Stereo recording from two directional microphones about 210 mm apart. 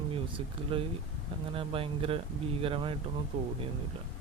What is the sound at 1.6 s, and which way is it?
Speech, 25° right (ahead or behind).